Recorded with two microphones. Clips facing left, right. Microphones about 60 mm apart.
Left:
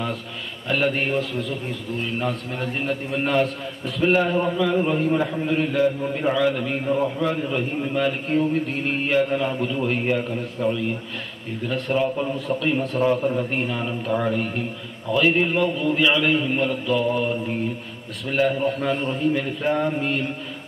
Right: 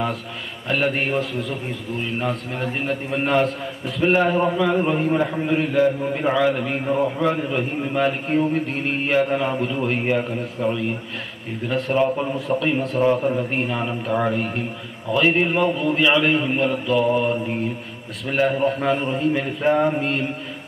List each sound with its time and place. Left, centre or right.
0.7 s a man's voice: centre
13.7 s a man's voice: centre